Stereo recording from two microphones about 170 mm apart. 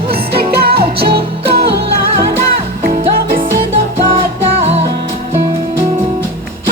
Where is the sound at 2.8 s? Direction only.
60° right (ahead or behind).